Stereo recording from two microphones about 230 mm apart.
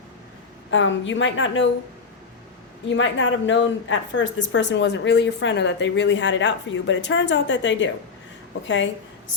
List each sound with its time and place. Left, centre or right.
0.7 s a woman's voice: left
2.9 s speech: left